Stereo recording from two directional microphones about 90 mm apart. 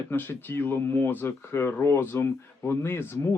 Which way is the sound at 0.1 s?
25° left (ahead or behind).